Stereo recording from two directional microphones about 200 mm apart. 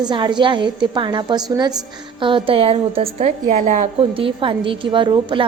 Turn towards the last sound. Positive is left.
turn(degrees=-25)  # may be behind; listen again after turning